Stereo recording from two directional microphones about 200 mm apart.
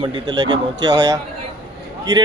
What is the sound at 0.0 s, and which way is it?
Speech, 20° right (ahead or behind).